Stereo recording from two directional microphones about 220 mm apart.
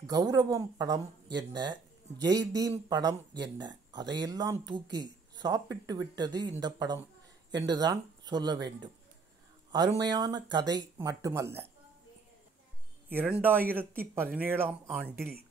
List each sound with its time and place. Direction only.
0.1 s speech: 15° right (ahead or behind)
13.1 s speech: 10° right (ahead or behind)
15.1 s speech: 45° right (ahead or behind)